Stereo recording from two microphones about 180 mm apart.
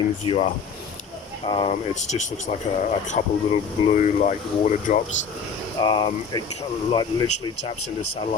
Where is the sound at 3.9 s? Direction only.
40° left (ahead or behind).